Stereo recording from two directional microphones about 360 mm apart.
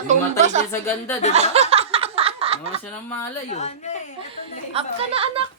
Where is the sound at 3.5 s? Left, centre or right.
Centre.